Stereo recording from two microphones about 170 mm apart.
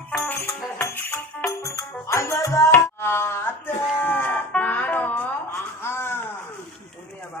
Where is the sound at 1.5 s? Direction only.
20° left (ahead or behind).